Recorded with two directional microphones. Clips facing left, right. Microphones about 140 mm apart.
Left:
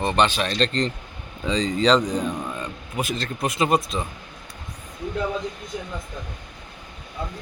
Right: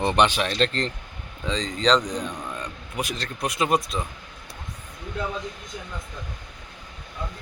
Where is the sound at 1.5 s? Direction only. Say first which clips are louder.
Left 3 dB; 5° left (ahead or behind).